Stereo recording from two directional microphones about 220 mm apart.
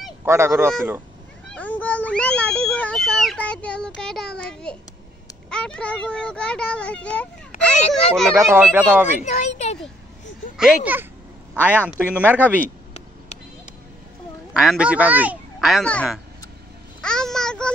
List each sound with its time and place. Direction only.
0.0 s speech: 10° right (ahead or behind)
1.5 s a sound: 5° left (ahead or behind)
5.5 s speech: 5° left (ahead or behind)
8.5 s speech: 10° right (ahead or behind)
9.2 s speech: 30° left (ahead or behind)
10.6 s speech: 5° right (ahead or behind)
12.4 s speech: 10° left (ahead or behind)
14.5 s a child's voice: 5° right (ahead or behind)